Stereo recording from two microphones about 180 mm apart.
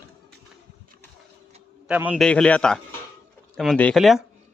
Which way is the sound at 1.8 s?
5° right (ahead or behind).